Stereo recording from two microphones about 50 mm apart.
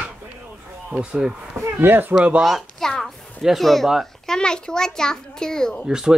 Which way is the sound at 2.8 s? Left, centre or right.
Centre.